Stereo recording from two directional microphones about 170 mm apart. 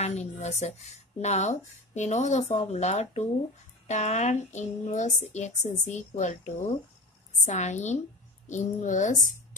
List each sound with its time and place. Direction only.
0.0 s speech: 40° left (ahead or behind)